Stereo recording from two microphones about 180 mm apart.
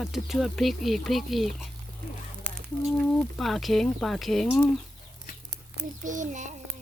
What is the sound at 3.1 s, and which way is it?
Speech, centre (ahead or behind).